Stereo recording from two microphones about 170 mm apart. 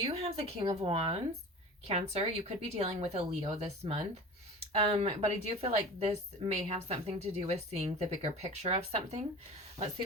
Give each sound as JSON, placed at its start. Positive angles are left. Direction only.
{"t": 0.0, "sound": "a woman's voice", "side_deg": -35}